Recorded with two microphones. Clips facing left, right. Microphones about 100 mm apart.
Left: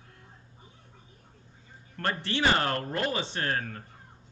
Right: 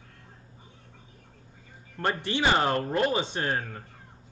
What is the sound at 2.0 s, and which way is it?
Speech, 15° right (ahead or behind).